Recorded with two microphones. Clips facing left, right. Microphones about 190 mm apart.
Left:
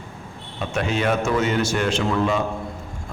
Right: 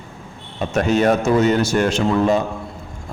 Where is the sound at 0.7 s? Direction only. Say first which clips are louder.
Right 6 dB; 40° right (ahead or behind).